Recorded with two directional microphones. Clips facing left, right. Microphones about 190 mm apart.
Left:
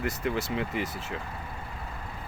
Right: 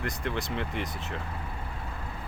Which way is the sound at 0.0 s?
5° left (ahead or behind).